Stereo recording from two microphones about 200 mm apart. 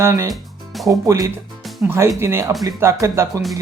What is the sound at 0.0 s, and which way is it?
Speech, 15° right (ahead or behind).